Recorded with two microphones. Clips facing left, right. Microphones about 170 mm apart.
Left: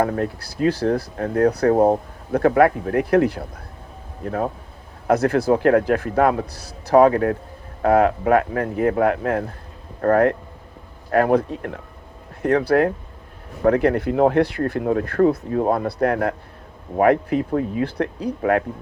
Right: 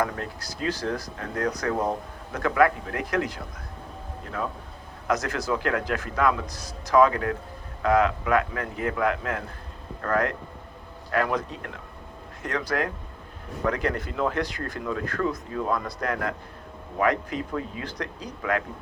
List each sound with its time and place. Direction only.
0.4 s speech: 60° left (ahead or behind)
4.3 s a man's voice: 45° left (ahead or behind)
5.0 s speech: 60° left (ahead or behind)
6.5 s a man's voice: 65° left (ahead or behind)
13.7 s a man's voice: 60° left (ahead or behind)